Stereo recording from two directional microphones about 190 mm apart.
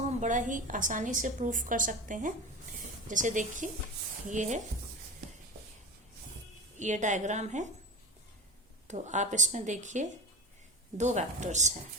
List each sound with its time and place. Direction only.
0.2 s a woman's voice: 40° right (ahead or behind)
6.7 s speech: 40° right (ahead or behind)
8.9 s speech: 40° right (ahead or behind)